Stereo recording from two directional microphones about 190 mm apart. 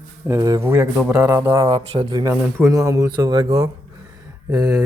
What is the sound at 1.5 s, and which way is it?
Speech, 30° right (ahead or behind).